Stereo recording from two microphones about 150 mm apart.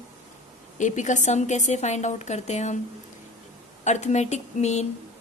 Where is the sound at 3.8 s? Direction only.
50° left (ahead or behind).